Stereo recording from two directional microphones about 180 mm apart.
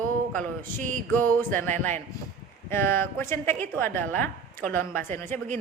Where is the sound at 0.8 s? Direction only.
45° right (ahead or behind).